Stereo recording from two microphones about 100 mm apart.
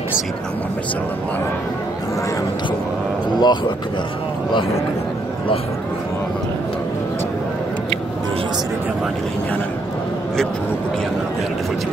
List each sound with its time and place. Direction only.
3.3 s speech: 45° left (ahead or behind)